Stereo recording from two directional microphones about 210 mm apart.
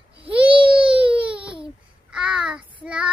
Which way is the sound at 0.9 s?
5° right (ahead or behind).